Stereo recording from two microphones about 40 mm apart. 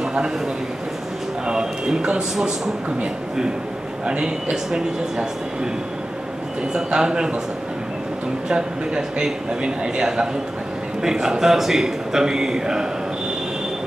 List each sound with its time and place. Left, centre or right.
0.0 s a sound: centre
1.4 s a man's voice: centre
2.3 s a man's voice: centre
4.0 s a man's voice: right
6.7 s a man's voice: centre
8.5 s a man's voice: centre